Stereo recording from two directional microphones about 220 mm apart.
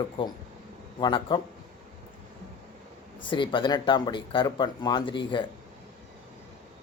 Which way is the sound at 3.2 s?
20° left (ahead or behind).